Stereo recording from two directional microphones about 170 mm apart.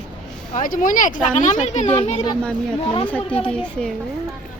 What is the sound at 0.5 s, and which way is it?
A child's voice, 50° left (ahead or behind).